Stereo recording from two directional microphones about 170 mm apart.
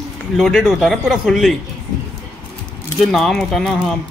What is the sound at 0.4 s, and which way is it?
Speech, centre (ahead or behind).